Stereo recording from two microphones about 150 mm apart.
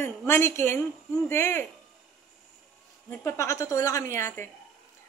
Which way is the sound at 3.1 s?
20° left (ahead or behind).